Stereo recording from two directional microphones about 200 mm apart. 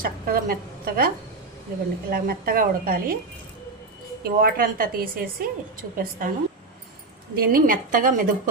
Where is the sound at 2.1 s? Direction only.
50° right (ahead or behind).